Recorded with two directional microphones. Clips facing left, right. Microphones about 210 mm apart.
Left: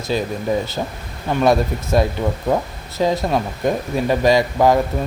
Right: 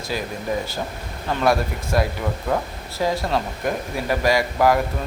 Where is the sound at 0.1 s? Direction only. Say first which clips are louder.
Left 6 dB; 25° left (ahead or behind).